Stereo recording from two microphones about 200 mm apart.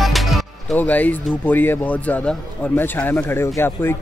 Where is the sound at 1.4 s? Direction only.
10° left (ahead or behind).